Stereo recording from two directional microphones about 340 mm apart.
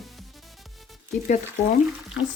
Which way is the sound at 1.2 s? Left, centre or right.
Left.